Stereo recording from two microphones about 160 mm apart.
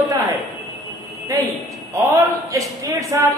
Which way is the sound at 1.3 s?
20° right (ahead or behind).